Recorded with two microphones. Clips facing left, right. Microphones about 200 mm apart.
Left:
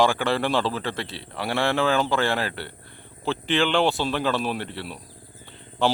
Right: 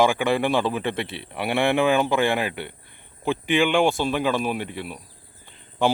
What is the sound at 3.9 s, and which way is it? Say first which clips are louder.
Speech: right 2 dB; 50° right (ahead or behind).